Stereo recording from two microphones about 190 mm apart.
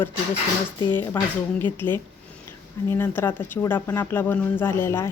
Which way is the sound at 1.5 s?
10° left (ahead or behind).